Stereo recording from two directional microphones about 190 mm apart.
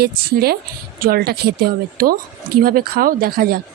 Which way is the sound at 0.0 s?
55° right (ahead or behind).